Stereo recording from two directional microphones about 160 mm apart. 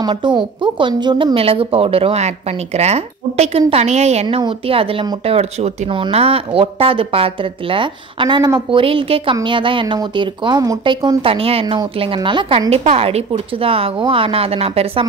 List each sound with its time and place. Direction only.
0.0 s speech: 30° right (ahead or behind)